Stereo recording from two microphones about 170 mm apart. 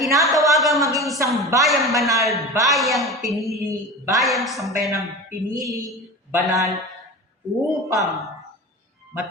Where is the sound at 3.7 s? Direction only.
15° right (ahead or behind).